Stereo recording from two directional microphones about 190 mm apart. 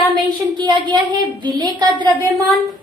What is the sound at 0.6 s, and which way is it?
Speech, 25° right (ahead or behind).